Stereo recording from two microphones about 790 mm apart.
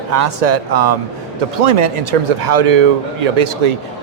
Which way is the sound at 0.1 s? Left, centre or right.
Right.